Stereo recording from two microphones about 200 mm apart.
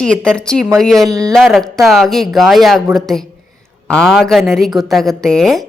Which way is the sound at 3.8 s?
5° left (ahead or behind).